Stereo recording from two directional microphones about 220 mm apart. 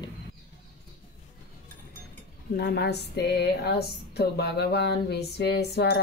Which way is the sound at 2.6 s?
50° left (ahead or behind).